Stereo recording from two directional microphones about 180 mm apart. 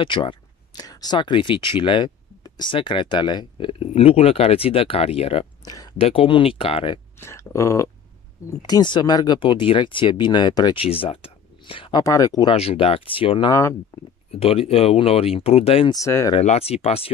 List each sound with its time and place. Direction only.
0.0 s speech: 25° left (ahead or behind)
7.2 s speech: 15° left (ahead or behind)
12.5 s speech: 35° left (ahead or behind)
13.5 s speech: 15° left (ahead or behind)
14.3 s speech: 35° left (ahead or behind)
15.9 s speech: 15° left (ahead or behind)
16.3 s speech: 35° left (ahead or behind)